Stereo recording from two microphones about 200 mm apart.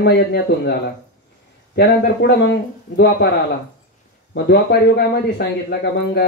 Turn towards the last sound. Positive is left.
turn(degrees=55)  # may be behind; listen again after turning